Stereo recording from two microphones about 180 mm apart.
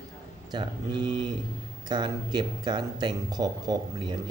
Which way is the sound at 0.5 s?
25° right (ahead or behind).